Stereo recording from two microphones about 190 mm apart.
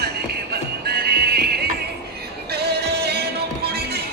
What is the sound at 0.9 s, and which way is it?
Music, 55° right (ahead or behind).